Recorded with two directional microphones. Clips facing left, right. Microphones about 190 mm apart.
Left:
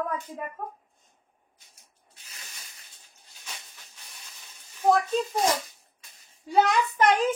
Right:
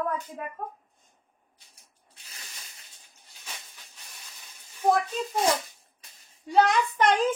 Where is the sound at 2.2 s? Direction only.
35° right (ahead or behind).